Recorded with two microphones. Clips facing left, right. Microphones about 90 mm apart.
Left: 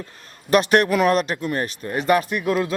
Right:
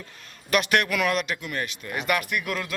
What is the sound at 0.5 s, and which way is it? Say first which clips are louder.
A man's voice: left 6 dB; 35° left (ahead or behind).